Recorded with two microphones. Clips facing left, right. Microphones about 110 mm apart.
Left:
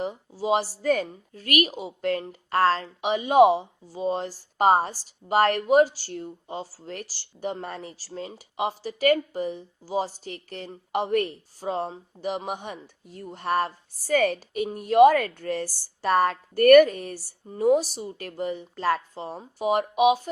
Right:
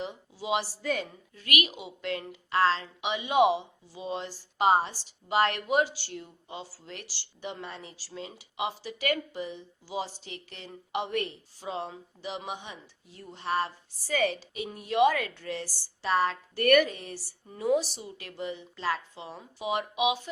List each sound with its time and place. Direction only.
0.0 s a woman's voice: 40° left (ahead or behind)